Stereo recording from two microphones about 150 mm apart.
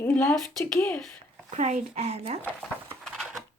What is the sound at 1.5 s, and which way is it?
Speech, 50° right (ahead or behind).